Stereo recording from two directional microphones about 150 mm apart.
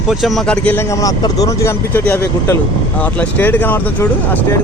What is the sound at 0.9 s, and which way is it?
Speech, 25° left (ahead or behind).